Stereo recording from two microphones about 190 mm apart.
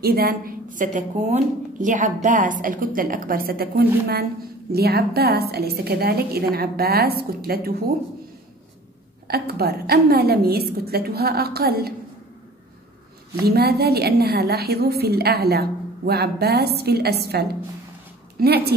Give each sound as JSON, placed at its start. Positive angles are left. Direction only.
{"t": 0.0, "sound": "a woman's voice", "side_deg": -55}
{"t": 9.3, "sound": "a woman's voice", "side_deg": -55}
{"t": 13.4, "sound": "a woman's voice", "side_deg": -55}